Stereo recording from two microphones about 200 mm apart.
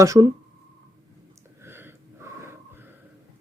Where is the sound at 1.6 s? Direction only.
10° right (ahead or behind).